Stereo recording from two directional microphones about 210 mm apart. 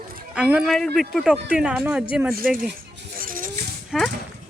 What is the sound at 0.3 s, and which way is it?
Speech, 5° right (ahead or behind).